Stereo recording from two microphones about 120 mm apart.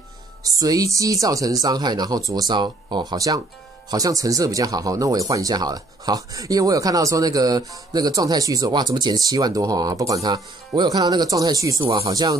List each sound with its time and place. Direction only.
0.4 s speech: 30° right (ahead or behind)